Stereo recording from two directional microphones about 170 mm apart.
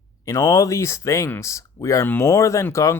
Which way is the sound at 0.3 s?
20° left (ahead or behind).